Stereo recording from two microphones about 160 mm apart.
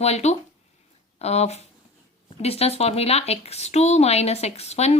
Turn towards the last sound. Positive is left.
turn(degrees=40)  # may be behind; listen again after turning